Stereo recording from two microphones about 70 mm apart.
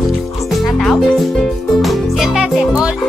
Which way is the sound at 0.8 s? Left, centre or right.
Centre.